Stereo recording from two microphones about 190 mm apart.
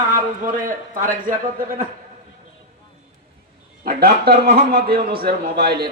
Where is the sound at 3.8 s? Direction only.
50° right (ahead or behind).